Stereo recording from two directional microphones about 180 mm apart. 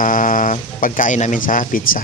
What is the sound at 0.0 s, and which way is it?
Speech, 45° left (ahead or behind).